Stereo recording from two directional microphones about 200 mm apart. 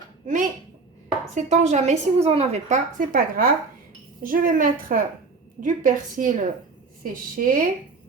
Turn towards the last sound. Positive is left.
turn(degrees=-45)  # may be behind; listen again after turning